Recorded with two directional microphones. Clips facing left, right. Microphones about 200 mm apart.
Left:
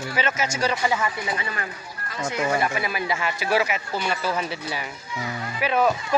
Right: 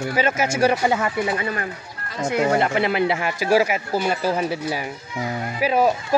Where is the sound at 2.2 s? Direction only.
60° right (ahead or behind).